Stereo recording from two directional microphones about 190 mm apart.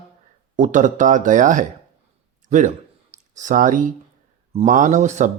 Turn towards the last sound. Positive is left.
turn(degrees=-40)  # may be behind; listen again after turning